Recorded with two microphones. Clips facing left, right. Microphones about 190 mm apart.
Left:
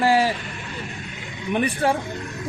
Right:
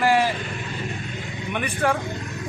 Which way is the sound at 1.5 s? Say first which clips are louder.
Left 3 dB; 35° left (ahead or behind).